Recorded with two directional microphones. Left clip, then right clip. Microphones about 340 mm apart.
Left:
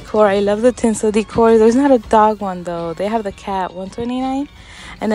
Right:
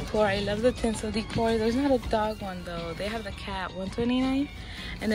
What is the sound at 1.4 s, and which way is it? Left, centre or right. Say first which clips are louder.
Speech: left 15 dB; left.